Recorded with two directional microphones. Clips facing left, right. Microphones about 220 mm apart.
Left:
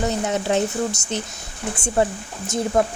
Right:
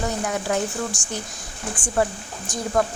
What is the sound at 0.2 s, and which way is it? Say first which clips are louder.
A woman's voice: left 3 dB; 25° left (ahead or behind).